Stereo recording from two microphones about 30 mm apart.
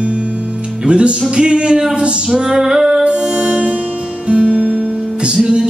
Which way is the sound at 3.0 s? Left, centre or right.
Right.